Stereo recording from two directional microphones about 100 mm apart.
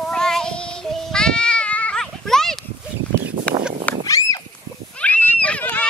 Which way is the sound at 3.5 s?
10° left (ahead or behind).